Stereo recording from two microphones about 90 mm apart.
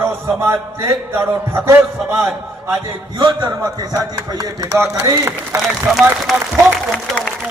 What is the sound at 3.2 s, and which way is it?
Speech, 55° right (ahead or behind).